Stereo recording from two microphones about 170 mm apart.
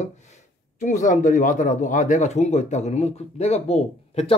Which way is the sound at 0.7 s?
45° left (ahead or behind).